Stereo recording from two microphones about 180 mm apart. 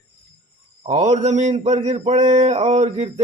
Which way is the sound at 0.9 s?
35° right (ahead or behind).